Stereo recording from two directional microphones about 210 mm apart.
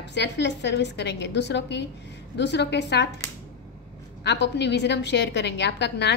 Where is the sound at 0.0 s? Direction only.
55° left (ahead or behind).